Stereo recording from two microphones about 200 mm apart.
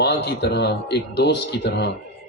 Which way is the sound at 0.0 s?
55° left (ahead or behind).